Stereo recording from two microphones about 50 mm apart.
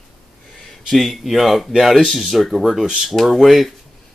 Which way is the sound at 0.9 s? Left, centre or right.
Centre.